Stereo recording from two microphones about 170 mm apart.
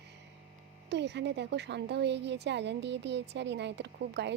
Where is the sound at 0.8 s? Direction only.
90° right.